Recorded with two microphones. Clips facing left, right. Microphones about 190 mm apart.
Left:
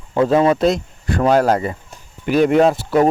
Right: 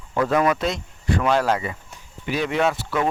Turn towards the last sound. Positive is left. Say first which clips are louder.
# left 8 dB
turn(degrees=35)  # may be behind; listen again after turning